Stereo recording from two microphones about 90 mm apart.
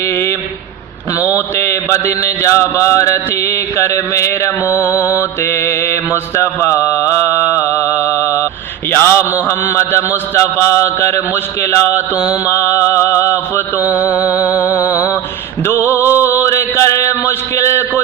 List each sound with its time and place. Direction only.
0.0 s a sound: 30° left (ahead or behind)
1.5 s mantra: 30° left (ahead or behind)
8.9 s a man's voice: 25° left (ahead or behind)
12.5 s mantra: 30° left (ahead or behind)
15.9 s music: 30° left (ahead or behind)
16.2 s mantra: 30° left (ahead or behind)